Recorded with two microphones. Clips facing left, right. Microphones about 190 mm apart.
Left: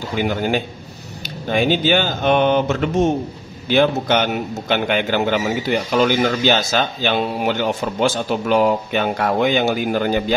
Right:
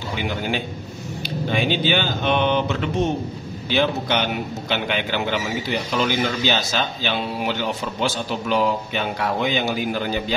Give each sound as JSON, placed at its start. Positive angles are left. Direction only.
{"t": 0.2, "sound": "a man's voice", "side_deg": 45}